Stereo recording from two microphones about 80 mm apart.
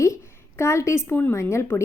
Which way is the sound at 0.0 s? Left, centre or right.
Left.